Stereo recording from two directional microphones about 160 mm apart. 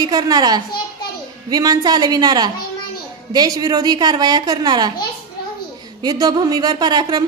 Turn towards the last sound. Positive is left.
turn(degrees=-25)  # may be behind; listen again after turning